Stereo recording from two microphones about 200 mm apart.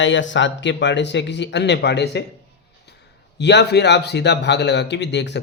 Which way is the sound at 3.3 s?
60° left (ahead or behind).